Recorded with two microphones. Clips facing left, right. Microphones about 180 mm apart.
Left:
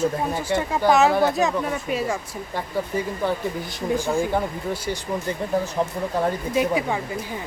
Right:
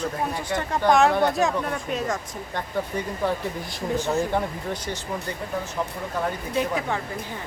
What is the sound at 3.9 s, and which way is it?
Speech, 10° left (ahead or behind).